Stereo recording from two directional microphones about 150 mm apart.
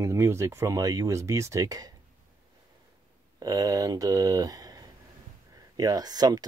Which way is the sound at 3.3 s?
25° right (ahead or behind).